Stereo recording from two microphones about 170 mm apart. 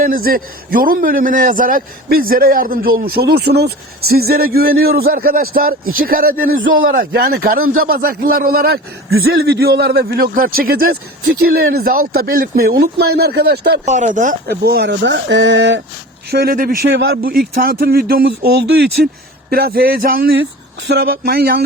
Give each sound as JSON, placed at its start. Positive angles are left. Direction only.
{"t": 0.0, "sound": "a man's voice", "side_deg": -60}
{"t": 13.8, "sound": "speech", "side_deg": -45}
{"t": 14.4, "sound": "speech", "side_deg": -65}
{"t": 16.3, "sound": "a man's voice", "side_deg": -65}